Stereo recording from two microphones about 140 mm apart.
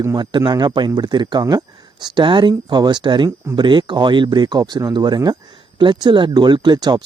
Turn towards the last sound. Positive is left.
turn(degrees=-30)  # may be behind; listen again after turning